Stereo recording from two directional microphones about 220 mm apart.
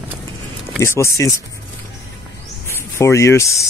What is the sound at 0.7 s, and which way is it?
Speech, 10° left (ahead or behind).